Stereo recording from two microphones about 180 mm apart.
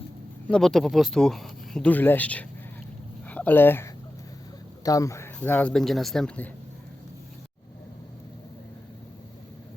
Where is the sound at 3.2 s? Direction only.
10° left (ahead or behind).